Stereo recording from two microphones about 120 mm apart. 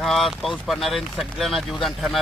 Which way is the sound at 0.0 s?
Centre (ahead or behind).